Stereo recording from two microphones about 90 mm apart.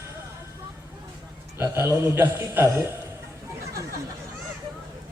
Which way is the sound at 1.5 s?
30° right (ahead or behind).